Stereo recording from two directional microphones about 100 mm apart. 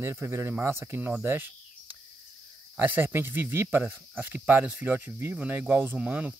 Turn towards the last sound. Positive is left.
turn(degrees=-15)  # may be behind; listen again after turning